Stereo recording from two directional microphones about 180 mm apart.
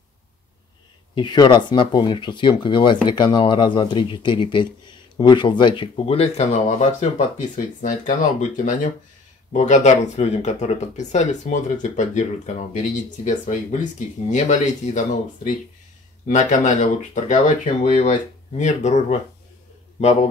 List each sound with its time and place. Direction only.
1.1 s speech: 25° left (ahead or behind)